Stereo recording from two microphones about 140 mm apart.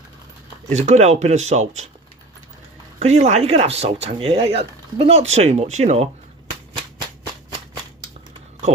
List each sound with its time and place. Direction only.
0.7 s speech: 55° right (ahead or behind)
3.0 s speech: 55° right (ahead or behind)